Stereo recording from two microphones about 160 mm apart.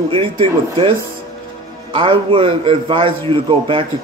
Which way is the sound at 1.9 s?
35° right (ahead or behind).